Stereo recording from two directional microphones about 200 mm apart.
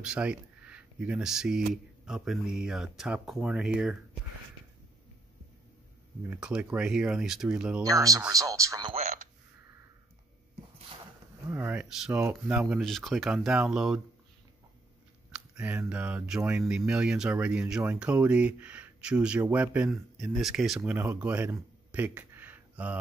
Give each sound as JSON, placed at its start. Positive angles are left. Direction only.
{"t": 0.0, "sound": "speech", "side_deg": -5}
{"t": 6.2, "sound": "speech", "side_deg": -5}
{"t": 7.8, "sound": "speech", "side_deg": -15}
{"t": 8.9, "sound": "a sound", "side_deg": -35}
{"t": 11.5, "sound": "speech", "side_deg": -10}
{"t": 15.3, "sound": "speech", "side_deg": -5}